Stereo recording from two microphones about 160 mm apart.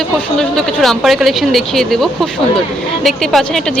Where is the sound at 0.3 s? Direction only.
Centre (ahead or behind).